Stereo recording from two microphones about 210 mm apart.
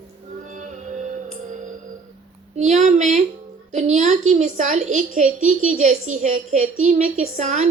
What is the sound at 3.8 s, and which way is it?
A woman's voice, 35° right (ahead or behind).